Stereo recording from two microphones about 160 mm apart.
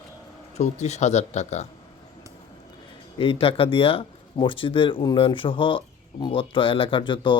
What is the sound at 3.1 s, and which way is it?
Speech, 35° left (ahead or behind).